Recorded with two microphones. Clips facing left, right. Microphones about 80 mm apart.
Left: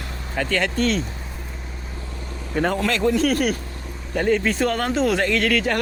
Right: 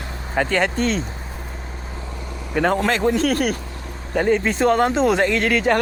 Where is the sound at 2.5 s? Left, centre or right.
Right.